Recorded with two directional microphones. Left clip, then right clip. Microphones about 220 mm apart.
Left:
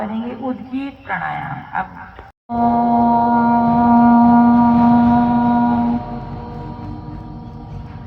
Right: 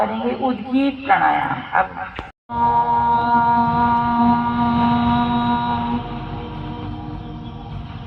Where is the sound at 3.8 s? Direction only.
35° left (ahead or behind).